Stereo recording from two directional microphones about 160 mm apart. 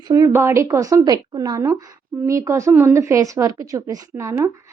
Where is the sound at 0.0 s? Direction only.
20° right (ahead or behind).